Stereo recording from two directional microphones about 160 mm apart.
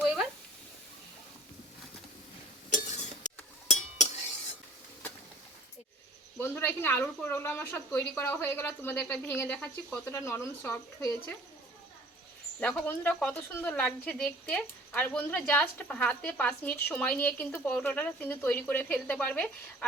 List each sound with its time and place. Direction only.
0.0 s a sound: 5° right (ahead or behind)
2.6 s cutlery: 50° left (ahead or behind)
6.4 s speech: 15° left (ahead or behind)
12.5 s speech: 10° left (ahead or behind)